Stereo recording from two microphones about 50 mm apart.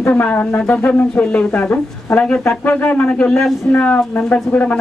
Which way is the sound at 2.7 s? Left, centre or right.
Left.